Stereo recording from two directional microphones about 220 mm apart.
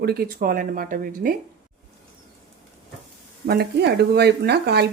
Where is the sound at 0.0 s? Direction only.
45° right (ahead or behind).